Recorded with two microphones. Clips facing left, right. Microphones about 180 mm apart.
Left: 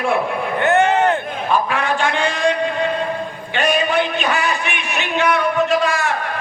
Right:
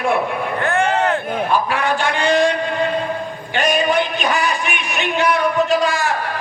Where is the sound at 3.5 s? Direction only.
40° right (ahead or behind).